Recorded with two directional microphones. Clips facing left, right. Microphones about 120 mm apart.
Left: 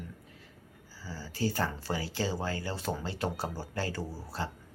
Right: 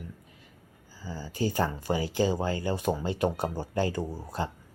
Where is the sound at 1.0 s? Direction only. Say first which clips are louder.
Right 3 dB; 15° right (ahead or behind).